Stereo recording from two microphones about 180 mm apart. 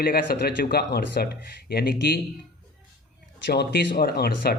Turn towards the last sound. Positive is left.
turn(degrees=60)  # may be behind; listen again after turning